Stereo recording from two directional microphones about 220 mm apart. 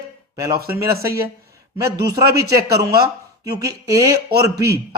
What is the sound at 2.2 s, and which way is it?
Speech, 45° right (ahead or behind).